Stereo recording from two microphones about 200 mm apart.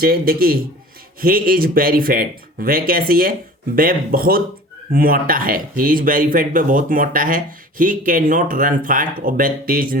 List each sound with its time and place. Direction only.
0.0 s speech: 45° right (ahead or behind)